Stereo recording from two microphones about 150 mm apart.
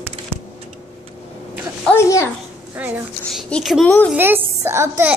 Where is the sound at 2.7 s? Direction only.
10° right (ahead or behind).